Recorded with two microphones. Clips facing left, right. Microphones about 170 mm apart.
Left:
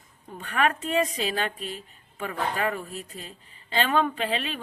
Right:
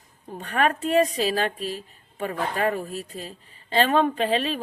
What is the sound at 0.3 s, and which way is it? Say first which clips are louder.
Speech: right 2 dB; 35° right (ahead or behind).